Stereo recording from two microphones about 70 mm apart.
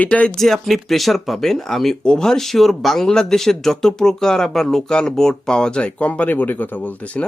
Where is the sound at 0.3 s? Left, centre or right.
Centre.